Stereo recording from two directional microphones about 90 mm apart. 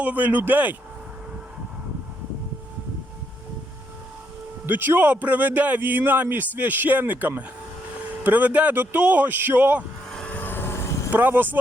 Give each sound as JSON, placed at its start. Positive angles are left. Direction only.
{"t": 0.0, "sound": "a man's voice", "side_deg": -15}
{"t": 4.6, "sound": "a man's voice", "side_deg": -25}
{"t": 10.1, "sound": "vehicle", "side_deg": 10}
{"t": 11.1, "sound": "a man's voice", "side_deg": -20}